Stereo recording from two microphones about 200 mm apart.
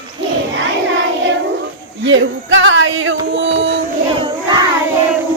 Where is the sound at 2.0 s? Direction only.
65° right (ahead or behind).